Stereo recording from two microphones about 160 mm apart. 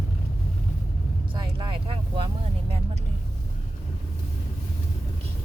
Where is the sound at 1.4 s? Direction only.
30° right (ahead or behind).